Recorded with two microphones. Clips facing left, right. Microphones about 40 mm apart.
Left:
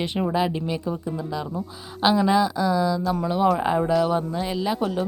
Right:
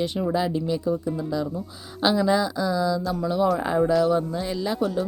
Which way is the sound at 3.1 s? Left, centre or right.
Left.